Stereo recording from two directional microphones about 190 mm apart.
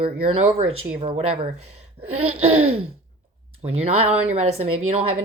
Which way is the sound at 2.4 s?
90° right.